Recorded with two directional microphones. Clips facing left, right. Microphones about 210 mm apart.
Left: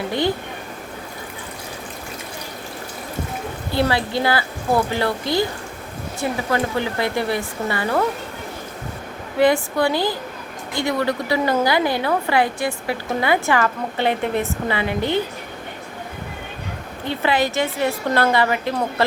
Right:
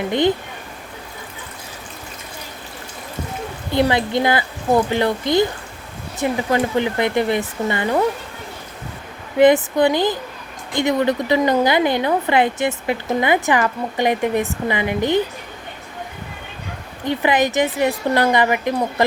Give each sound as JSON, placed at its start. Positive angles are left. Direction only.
{"t": 0.1, "sound": "a woman's voice", "side_deg": -20}
{"t": 3.7, "sound": "a woman's voice", "side_deg": -20}
{"t": 9.4, "sound": "a woman's voice", "side_deg": -20}
{"t": 17.0, "sound": "a woman's voice", "side_deg": -15}